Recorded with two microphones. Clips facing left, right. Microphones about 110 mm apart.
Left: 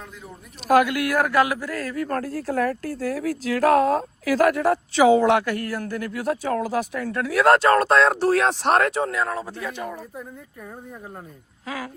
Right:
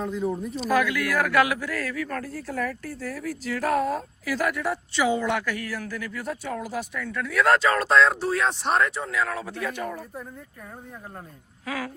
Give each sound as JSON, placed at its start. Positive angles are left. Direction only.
{"t": 0.5, "sound": "speech", "side_deg": 65}
{"t": 1.3, "sound": "speech", "side_deg": 35}
{"t": 2.2, "sound": "speech", "side_deg": 70}
{"t": 2.9, "sound": "speech", "side_deg": 45}
{"t": 3.2, "sound": "speech", "side_deg": 90}
{"t": 5.5, "sound": "speech", "side_deg": 55}
{"t": 7.1, "sound": "speech", "side_deg": 70}
{"t": 9.1, "sound": "speech", "side_deg": 35}
{"t": 9.6, "sound": "speech", "side_deg": 20}
{"t": 11.6, "sound": "speech", "side_deg": 20}